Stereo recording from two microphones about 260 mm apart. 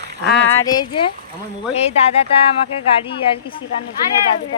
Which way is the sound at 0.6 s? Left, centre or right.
Centre.